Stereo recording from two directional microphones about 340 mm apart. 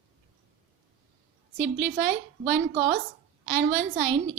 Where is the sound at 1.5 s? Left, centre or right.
Right.